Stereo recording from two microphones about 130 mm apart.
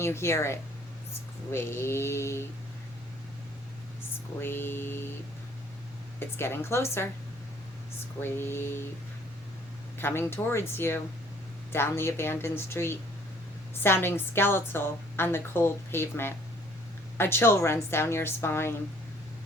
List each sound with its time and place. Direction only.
0.0 s a woman's voice: 20° left (ahead or behind)
4.4 s a woman's voice: 15° left (ahead or behind)
6.1 s a woman's voice: 20° left (ahead or behind)
8.2 s a woman's voice: 20° left (ahead or behind)
10.0 s a woman's voice: 20° left (ahead or behind)